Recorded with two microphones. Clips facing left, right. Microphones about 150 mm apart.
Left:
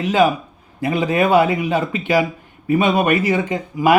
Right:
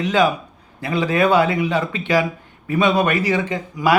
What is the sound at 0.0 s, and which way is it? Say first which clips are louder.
Speech: left 2 dB; 10° left (ahead or behind).